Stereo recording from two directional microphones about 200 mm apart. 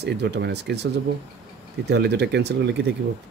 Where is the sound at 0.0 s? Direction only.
55° right (ahead or behind).